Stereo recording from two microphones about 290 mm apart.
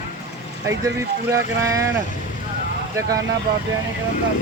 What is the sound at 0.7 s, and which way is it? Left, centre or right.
Speech, centre.